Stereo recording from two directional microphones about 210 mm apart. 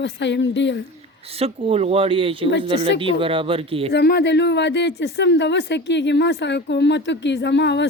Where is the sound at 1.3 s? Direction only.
30° right (ahead or behind).